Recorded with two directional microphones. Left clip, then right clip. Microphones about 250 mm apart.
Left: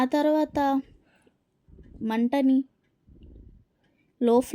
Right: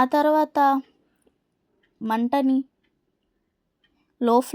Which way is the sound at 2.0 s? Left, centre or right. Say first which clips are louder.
Right 2 dB; centre.